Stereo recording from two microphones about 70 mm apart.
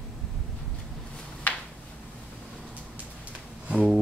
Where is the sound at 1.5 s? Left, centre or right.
Left.